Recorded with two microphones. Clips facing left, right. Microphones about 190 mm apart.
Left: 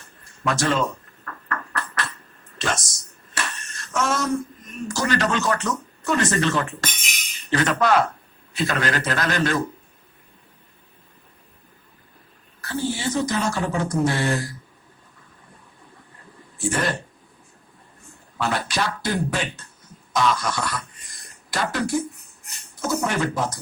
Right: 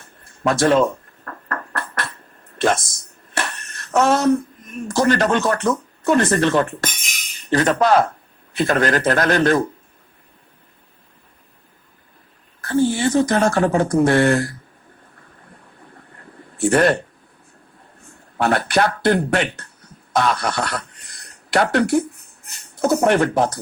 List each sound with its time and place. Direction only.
0.5 s a sound: 55° right (ahead or behind)
2.6 s speech: 55° right (ahead or behind)
3.3 s a sound: 60° right (ahead or behind)
4.9 s speech: 55° right (ahead or behind)
7.5 s speech: 35° right (ahead or behind)
8.5 s a man's voice: 50° right (ahead or behind)
12.6 s speech: 55° right (ahead or behind)
16.6 s speech: 60° right (ahead or behind)
18.3 s speech: 60° right (ahead or behind)